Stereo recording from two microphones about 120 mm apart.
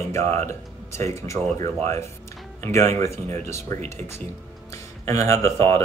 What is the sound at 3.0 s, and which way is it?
Speech, 25° left (ahead or behind).